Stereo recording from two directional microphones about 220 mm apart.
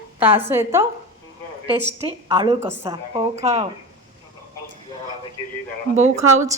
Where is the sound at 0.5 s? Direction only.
10° right (ahead or behind).